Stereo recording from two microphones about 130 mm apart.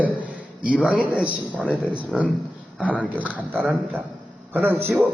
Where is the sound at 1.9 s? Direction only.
10° right (ahead or behind).